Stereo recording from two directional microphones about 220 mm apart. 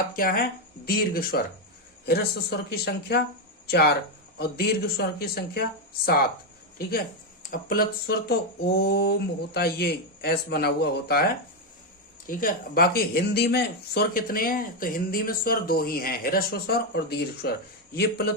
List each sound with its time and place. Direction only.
0.2 s speech: 40° left (ahead or behind)
7.4 s speech: 40° left (ahead or behind)